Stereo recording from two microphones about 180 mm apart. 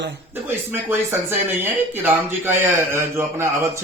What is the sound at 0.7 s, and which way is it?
Speech, 10° right (ahead or behind).